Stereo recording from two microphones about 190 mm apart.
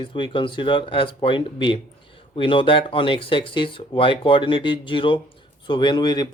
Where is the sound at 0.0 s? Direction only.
25° left (ahead or behind).